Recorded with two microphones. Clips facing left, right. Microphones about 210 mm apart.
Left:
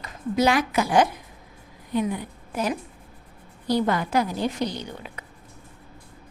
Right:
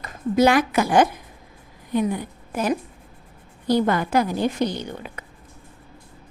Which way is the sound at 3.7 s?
55° right (ahead or behind).